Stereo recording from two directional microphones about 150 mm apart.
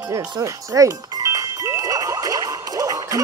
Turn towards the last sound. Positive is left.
turn(degrees=-25)  # may be behind; listen again after turning